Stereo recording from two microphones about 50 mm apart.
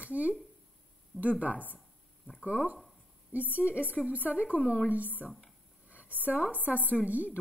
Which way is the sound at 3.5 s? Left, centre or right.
Right.